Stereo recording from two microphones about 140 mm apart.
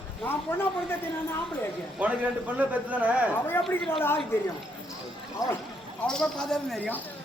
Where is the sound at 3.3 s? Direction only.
15° left (ahead or behind).